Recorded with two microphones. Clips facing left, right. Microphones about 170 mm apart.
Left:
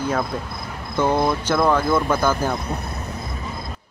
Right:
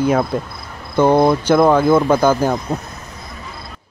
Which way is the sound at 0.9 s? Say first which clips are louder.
Right 7 dB; 25° right (ahead or behind).